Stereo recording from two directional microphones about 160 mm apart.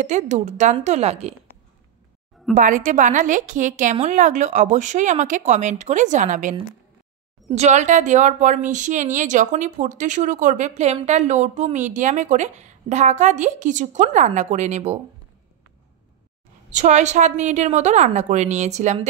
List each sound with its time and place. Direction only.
0.0 s a woman's voice: 45° right (ahead or behind)
2.5 s a woman's voice: 55° right (ahead or behind)
7.5 s a woman's voice: 45° right (ahead or behind)
16.7 s a woman's voice: 50° right (ahead or behind)